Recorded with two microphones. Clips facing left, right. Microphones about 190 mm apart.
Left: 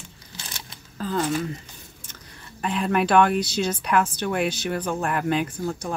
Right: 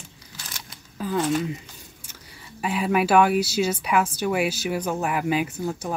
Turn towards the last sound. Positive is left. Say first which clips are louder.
# even
turn(degrees=-5)  # may be behind; listen again after turning